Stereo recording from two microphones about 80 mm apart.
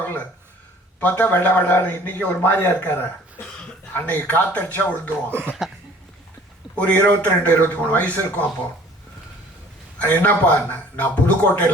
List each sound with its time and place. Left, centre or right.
0.9 s a man's voice: left
5.6 s cough: centre
6.7 s a man's voice: centre
10.0 s a man's voice: left